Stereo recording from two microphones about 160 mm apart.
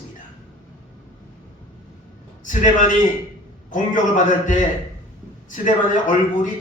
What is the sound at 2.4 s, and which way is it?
A man's voice, 50° left (ahead or behind).